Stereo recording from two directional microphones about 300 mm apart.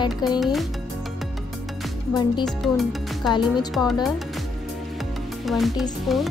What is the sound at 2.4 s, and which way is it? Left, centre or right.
Speech, centre.